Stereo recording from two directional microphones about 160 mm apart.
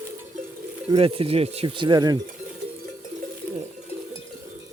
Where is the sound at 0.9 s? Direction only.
35° right (ahead or behind).